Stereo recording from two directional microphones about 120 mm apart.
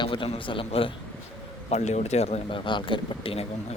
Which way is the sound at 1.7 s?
75° left (ahead or behind).